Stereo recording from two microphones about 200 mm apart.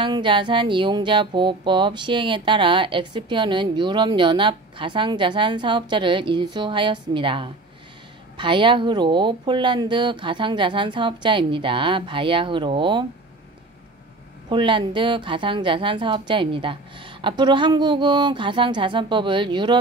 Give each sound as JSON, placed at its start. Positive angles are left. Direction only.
{"t": 0.0, "sound": "speech", "side_deg": -25}
{"t": 14.5, "sound": "speech", "side_deg": -25}